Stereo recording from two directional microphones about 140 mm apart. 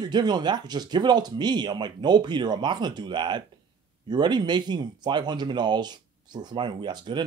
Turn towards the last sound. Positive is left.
turn(degrees=-30)  # may be behind; listen again after turning